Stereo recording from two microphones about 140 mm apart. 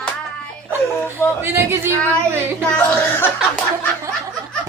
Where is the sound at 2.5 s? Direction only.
5° left (ahead or behind).